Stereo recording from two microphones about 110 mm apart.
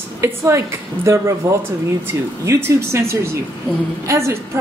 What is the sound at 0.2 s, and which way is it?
Speech, 25° right (ahead or behind).